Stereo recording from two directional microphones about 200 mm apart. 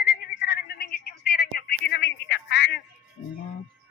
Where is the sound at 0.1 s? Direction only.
50° left (ahead or behind).